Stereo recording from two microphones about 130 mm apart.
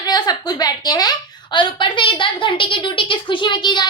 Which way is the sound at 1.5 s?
40° left (ahead or behind).